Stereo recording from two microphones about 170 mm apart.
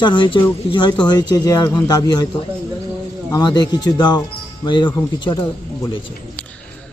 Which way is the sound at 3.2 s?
20° left (ahead or behind).